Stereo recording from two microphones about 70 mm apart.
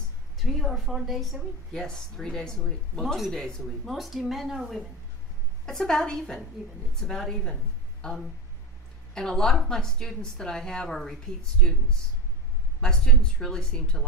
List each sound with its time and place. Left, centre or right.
0.3 s a woman's voice: centre
5.6 s a woman's voice: centre
12.8 s a woman's voice: centre